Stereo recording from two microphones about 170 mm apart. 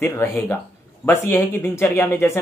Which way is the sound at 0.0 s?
15° left (ahead or behind).